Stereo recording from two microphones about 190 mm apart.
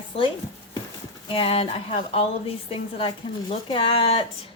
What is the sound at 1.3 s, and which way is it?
Speech, 30° left (ahead or behind).